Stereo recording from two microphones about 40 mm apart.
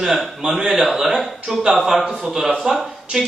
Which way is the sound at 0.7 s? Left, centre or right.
Centre.